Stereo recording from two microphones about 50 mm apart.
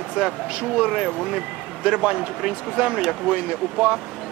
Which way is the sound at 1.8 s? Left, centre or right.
Centre.